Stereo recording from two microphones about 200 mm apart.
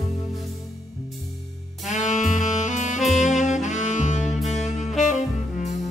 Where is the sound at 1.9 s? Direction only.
35° left (ahead or behind).